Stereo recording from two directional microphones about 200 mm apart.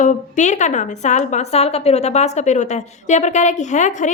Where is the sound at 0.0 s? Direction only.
35° left (ahead or behind).